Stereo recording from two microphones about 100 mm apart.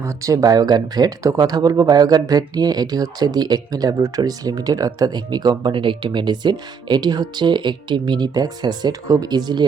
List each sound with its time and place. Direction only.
0.0 s speech: 30° right (ahead or behind)